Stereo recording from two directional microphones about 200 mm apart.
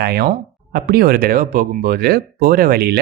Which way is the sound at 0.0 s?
55° right (ahead or behind).